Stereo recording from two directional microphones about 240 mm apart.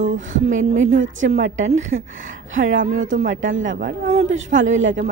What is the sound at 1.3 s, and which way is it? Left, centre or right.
Speech, right.